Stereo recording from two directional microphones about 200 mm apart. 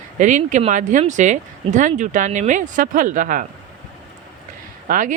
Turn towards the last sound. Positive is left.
turn(degrees=-40)  # may be behind; listen again after turning